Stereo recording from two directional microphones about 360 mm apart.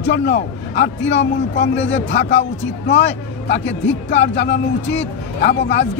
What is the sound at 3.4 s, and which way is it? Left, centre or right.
Speech, left.